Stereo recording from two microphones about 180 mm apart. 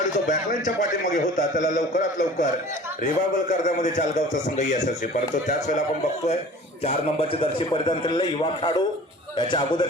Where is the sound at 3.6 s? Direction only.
45° left (ahead or behind).